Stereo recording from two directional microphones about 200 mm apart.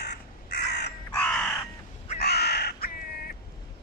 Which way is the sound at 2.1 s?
55° left (ahead or behind).